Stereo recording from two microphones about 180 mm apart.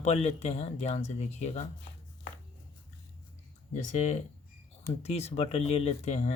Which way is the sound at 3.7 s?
40° left (ahead or behind).